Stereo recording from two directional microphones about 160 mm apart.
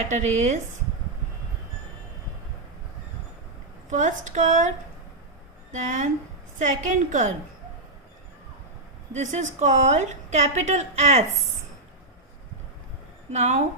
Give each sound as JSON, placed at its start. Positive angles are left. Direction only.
{"t": 0.1, "sound": "a woman's voice", "side_deg": -50}
{"t": 3.8, "sound": "a woman's voice", "side_deg": -50}
{"t": 5.7, "sound": "a woman's voice", "side_deg": -50}
{"t": 9.1, "sound": "a woman's voice", "side_deg": -50}
{"t": 13.3, "sound": "a woman's voice", "side_deg": -45}